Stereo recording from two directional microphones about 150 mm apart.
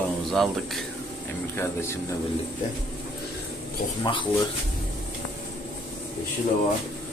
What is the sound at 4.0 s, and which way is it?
Speech, 35° left (ahead or behind).